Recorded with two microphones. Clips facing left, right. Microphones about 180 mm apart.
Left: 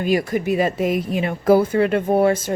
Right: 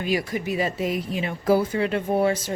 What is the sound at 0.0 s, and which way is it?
Speech, 50° left (ahead or behind).